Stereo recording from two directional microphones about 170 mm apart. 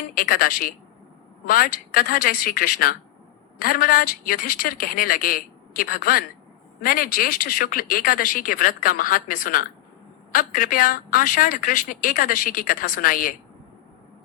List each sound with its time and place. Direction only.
0.1 s a woman's voice: 55° left (ahead or behind)